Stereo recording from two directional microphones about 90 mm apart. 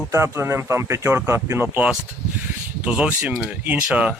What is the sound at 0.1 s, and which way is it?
Speech, 30° right (ahead or behind).